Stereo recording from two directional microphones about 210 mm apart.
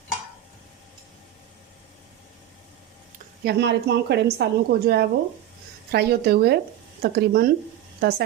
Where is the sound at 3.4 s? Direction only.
50° right (ahead or behind).